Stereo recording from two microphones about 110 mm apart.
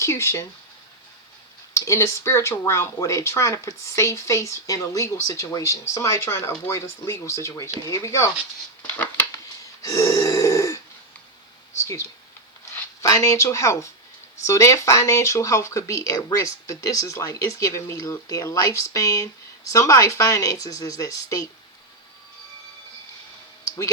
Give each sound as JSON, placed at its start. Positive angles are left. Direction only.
{"t": 0.0, "sound": "speech", "side_deg": 25}
{"t": 1.7, "sound": "speech", "side_deg": 25}
{"t": 8.8, "sound": "scissors", "side_deg": 15}
{"t": 9.8, "sound": "grunt", "side_deg": 30}
{"t": 11.8, "sound": "speech", "side_deg": 25}